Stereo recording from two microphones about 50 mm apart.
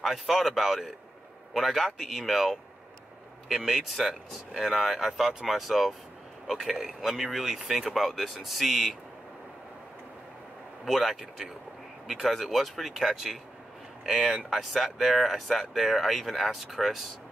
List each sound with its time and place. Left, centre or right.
0.0 s a man's voice: centre
10.9 s speech: centre
14.5 s speech: centre